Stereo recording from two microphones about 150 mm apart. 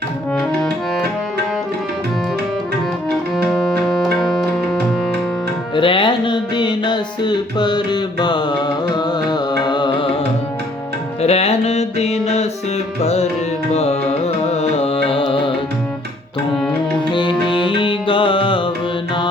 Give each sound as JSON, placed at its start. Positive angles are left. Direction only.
{"t": 0.3, "sound": "music", "side_deg": 5}
{"t": 3.3, "sound": "music", "side_deg": 0}
{"t": 5.7, "sound": "music", "side_deg": 35}
{"t": 11.2, "sound": "music", "side_deg": 45}
{"t": 14.5, "sound": "music", "side_deg": 45}
{"t": 17.1, "sound": "music", "side_deg": 35}